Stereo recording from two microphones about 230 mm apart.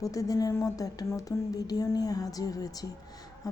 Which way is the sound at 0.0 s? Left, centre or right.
Centre.